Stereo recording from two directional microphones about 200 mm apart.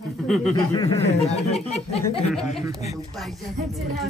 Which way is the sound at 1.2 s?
30° left (ahead or behind).